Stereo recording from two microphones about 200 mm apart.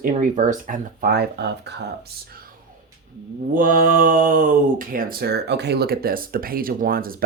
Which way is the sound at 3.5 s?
45° right (ahead or behind).